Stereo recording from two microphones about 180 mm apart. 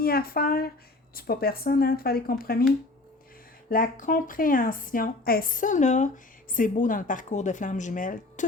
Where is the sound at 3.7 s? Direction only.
50° left (ahead or behind).